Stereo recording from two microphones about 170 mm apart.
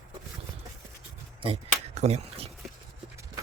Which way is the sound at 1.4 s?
35° right (ahead or behind).